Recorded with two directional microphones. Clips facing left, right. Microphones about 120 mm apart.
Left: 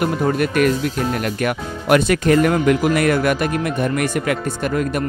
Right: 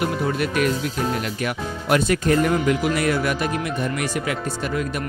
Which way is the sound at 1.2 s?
65° left (ahead or behind).